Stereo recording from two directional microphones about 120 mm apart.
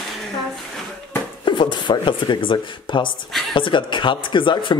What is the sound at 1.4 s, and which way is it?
Speech, 40° left (ahead or behind).